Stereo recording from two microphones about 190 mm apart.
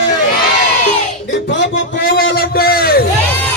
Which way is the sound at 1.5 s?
70° left (ahead or behind).